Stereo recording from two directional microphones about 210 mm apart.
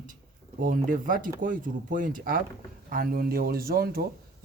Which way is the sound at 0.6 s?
40° right (ahead or behind).